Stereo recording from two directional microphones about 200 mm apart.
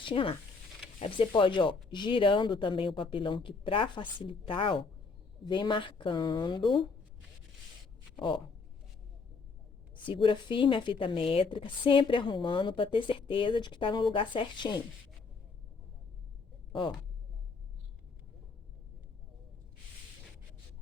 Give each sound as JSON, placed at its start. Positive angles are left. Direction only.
{"t": 0.0, "sound": "a woman's voice", "side_deg": 25}
{"t": 8.1, "sound": "speech", "side_deg": 25}
{"t": 9.9, "sound": "a woman's voice", "side_deg": 25}